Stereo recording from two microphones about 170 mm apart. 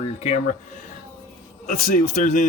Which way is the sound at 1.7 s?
50° left (ahead or behind).